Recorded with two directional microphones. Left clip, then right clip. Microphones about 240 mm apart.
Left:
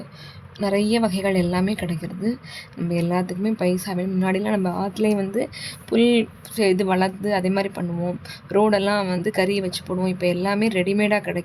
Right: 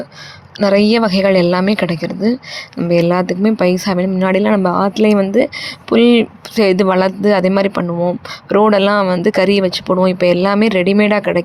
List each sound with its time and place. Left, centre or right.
0.6 s speech: centre